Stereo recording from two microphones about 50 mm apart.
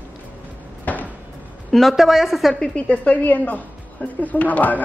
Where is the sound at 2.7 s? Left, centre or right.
Left.